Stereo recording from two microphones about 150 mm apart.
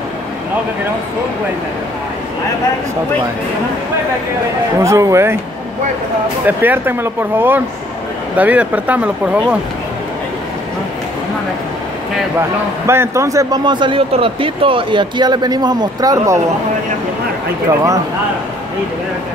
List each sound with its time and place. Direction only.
4.7 s speech: 20° right (ahead or behind)
6.4 s speech: 15° right (ahead or behind)
12.4 s a man's voice: 15° right (ahead or behind)